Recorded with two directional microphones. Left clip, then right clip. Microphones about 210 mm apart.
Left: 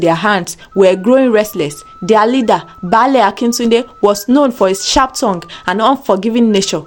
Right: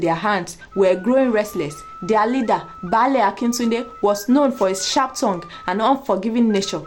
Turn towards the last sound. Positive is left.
turn(degrees=35)  # may be behind; listen again after turning